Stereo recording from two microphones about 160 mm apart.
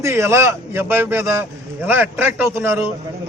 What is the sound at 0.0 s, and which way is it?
A man's voice, 15° right (ahead or behind).